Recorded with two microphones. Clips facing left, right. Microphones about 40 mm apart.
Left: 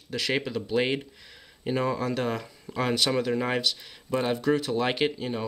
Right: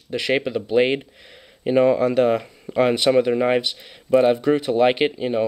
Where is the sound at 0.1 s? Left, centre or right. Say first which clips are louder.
Right 7 dB; right.